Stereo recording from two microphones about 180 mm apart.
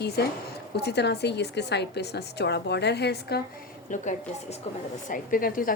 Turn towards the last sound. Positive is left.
turn(degrees=50)  # may be behind; listen again after turning